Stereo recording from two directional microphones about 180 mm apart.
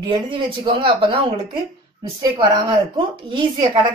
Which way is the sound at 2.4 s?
25° right (ahead or behind).